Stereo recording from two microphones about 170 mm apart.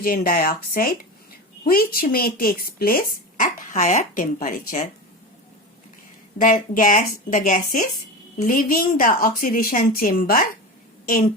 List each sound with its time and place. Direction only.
0.0 s a woman's voice: 55° left (ahead or behind)
6.4 s a woman's voice: 50° left (ahead or behind)